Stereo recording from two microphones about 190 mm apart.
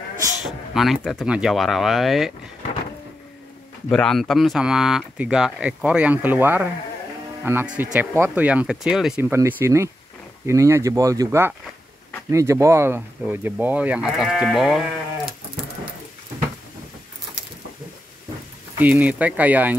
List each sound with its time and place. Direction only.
0.7 s speech: centre (ahead or behind)
3.9 s speech: centre (ahead or behind)
18.8 s speech: 10° right (ahead or behind)